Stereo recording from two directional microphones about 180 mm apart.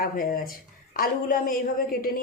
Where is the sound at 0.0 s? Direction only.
55° left (ahead or behind).